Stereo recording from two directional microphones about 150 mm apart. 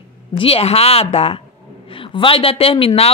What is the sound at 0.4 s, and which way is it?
Speech, 40° left (ahead or behind).